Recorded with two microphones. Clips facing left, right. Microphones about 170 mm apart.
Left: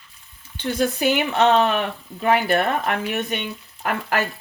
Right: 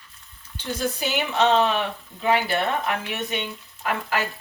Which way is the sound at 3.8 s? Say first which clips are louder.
Left 2 dB; 60° left (ahead or behind).